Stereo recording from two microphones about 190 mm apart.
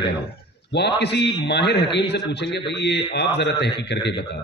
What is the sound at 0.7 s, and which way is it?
A man's voice, 60° left (ahead or behind).